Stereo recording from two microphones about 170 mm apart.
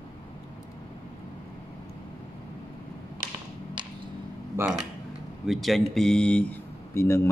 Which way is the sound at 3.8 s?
30° right (ahead or behind).